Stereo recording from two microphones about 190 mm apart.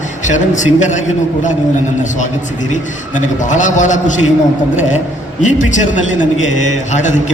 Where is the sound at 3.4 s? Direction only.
40° left (ahead or behind).